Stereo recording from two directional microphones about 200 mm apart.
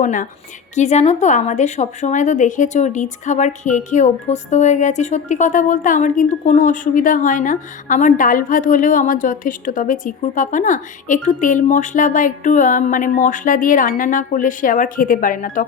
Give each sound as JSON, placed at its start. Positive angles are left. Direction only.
{"t": 0.0, "sound": "a woman's voice", "side_deg": 40}